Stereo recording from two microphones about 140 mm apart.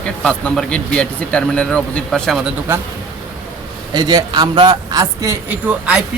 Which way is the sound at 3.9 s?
30° right (ahead or behind).